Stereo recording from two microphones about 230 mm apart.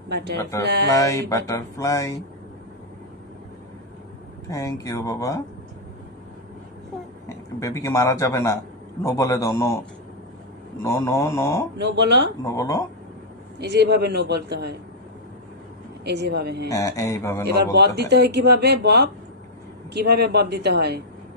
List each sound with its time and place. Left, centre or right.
0.1 s speech: right
0.4 s speech: centre
4.5 s speech: centre
7.2 s a man's voice: centre
11.8 s speech: right
12.4 s speech: centre
13.6 s speech: right
16.0 s speech: right
16.6 s speech: centre
17.7 s speech: right